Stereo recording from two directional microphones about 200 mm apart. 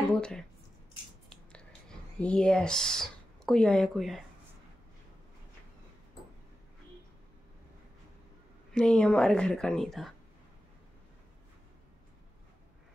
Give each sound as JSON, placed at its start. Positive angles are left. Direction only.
{"t": 0.1, "sound": "speech", "side_deg": 5}
{"t": 1.3, "sound": "whispering", "side_deg": 5}
{"t": 8.7, "sound": "a woman's voice", "side_deg": 5}